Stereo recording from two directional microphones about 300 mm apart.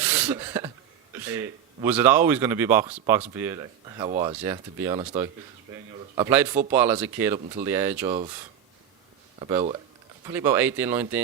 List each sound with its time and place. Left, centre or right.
0.0 s a sound: centre
1.1 s speech: centre
9.4 s speech: centre